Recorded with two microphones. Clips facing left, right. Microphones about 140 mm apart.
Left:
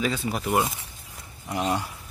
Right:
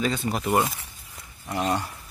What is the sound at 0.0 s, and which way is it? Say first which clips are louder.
Speech: right 1 dB; 5° left (ahead or behind).